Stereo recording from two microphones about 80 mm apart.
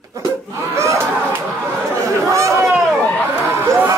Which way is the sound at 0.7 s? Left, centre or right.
Right.